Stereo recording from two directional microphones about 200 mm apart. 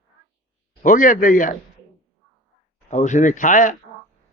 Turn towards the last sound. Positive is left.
turn(degrees=40)  # may be behind; listen again after turning